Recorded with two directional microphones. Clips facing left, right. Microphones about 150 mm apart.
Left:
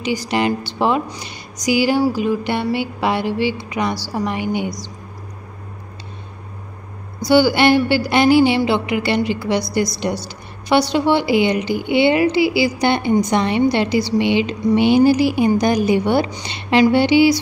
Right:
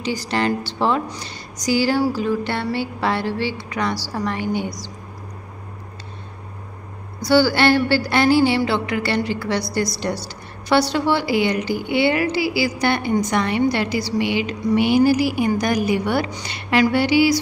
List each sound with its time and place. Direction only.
0.0 s a woman's voice: 15° left (ahead or behind)
7.2 s a woman's voice: 15° left (ahead or behind)